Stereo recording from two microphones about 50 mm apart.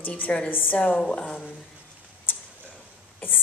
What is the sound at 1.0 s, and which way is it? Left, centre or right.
Speech, centre.